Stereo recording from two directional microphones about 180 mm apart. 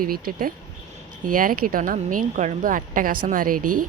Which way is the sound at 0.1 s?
55° right (ahead or behind).